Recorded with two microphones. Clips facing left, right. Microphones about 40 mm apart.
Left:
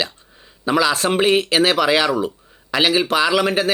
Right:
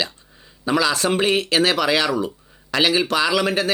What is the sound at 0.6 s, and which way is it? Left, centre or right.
Speech, centre.